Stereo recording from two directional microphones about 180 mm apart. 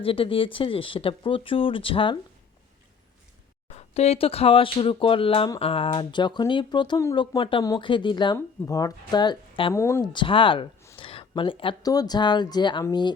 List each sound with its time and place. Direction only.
0.0 s speech: 30° left (ahead or behind)
3.7 s speech: 35° left (ahead or behind)
9.7 s speech: 15° left (ahead or behind)